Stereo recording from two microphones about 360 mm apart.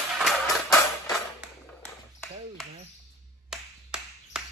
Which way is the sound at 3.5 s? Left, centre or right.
Centre.